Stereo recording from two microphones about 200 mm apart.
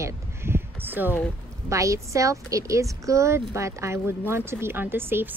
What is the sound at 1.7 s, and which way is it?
A woman's voice, 15° right (ahead or behind).